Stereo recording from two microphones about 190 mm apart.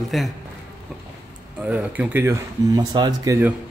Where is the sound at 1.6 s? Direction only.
10° right (ahead or behind).